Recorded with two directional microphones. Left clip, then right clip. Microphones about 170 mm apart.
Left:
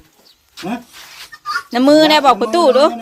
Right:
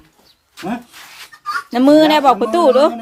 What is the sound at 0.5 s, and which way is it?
Speech, 5° left (ahead or behind).